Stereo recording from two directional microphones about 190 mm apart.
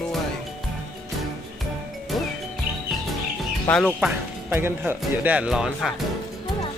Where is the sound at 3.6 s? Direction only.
5° left (ahead or behind).